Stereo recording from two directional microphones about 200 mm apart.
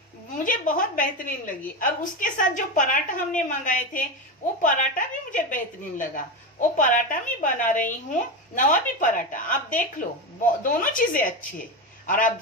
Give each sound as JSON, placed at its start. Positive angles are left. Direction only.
{"t": 0.3, "sound": "a woman's voice", "side_deg": 40}